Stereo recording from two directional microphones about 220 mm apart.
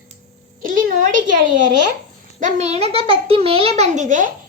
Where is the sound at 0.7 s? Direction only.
40° right (ahead or behind).